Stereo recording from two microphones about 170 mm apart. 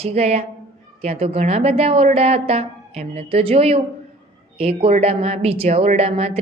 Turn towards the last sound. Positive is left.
turn(degrees=-40)  # may be behind; listen again after turning